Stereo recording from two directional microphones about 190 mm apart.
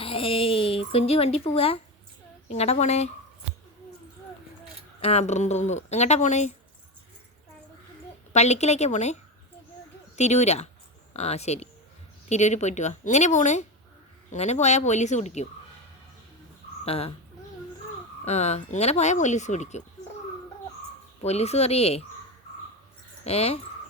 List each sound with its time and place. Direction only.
0.0 s speech: 30° left (ahead or behind)
4.9 s speech: 35° left (ahead or behind)
8.3 s speech: 35° left (ahead or behind)
10.2 s speech: 35° left (ahead or behind)
16.8 s speech: 30° left (ahead or behind)
18.3 s speech: 35° left (ahead or behind)
21.2 s speech: 35° left (ahead or behind)
23.2 s speech: 35° left (ahead or behind)